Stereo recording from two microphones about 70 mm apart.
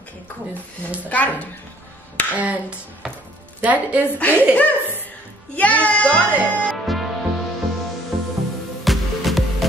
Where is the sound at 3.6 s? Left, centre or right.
Right.